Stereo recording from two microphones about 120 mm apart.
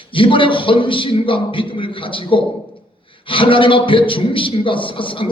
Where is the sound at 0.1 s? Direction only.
45° left (ahead or behind).